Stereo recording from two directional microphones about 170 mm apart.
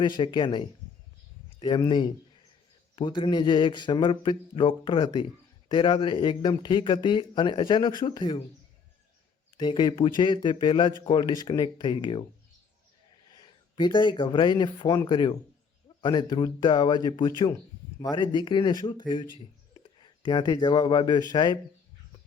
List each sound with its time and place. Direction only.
0.0 s speech: 25° left (ahead or behind)
2.9 s speech: 30° left (ahead or behind)
9.6 s speech: 25° left (ahead or behind)
13.3 s speech: 25° left (ahead or behind)